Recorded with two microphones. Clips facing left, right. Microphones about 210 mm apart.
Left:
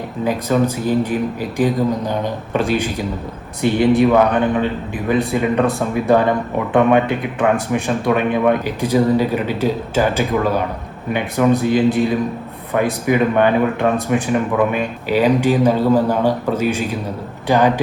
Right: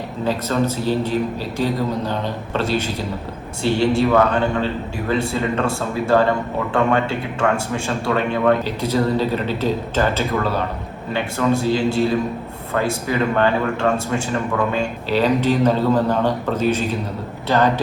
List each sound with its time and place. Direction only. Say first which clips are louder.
0.3 s speech: left 3 dB; 15° left (ahead or behind)